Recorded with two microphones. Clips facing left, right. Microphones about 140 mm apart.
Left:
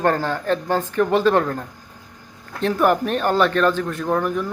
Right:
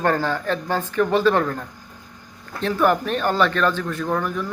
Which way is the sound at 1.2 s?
30° left (ahead or behind).